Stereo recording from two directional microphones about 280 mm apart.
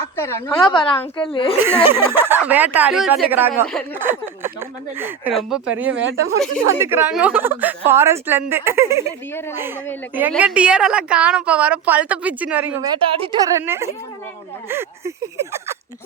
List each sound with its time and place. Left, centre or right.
0.2 s a woman's voice: centre
0.7 s a woman's voice: centre
1.6 s a woman's voice: centre
3.9 s a sound: centre
4.9 s a woman's voice: centre
5.9 s a woman's voice: right
6.7 s a woman's voice: centre
10.2 s a woman's voice: centre
13.0 s a woman's voice: centre